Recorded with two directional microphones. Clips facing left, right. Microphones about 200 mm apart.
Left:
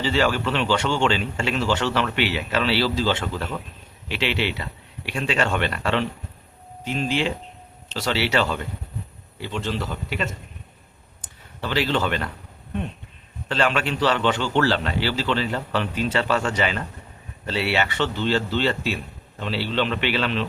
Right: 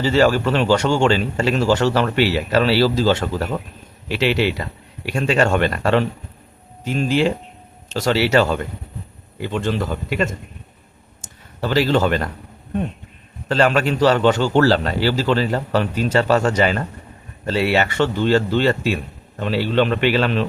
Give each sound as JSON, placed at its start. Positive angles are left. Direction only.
{"t": 0.0, "sound": "a man's voice", "side_deg": -40}
{"t": 13.5, "sound": "a man's voice", "side_deg": -40}